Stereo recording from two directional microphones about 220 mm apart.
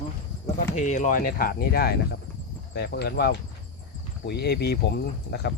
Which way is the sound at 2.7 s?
45° left (ahead or behind).